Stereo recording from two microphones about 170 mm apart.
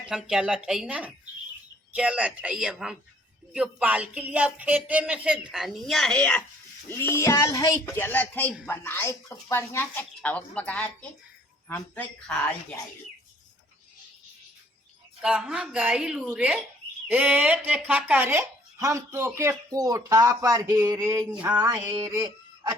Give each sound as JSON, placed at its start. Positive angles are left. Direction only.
{"t": 0.1, "sound": "speech", "side_deg": -5}
{"t": 15.2, "sound": "a woman's voice", "side_deg": -5}
{"t": 22.0, "sound": "a sound", "side_deg": -20}